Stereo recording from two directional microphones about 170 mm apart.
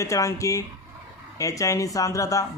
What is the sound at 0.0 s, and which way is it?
Speech, 20° left (ahead or behind).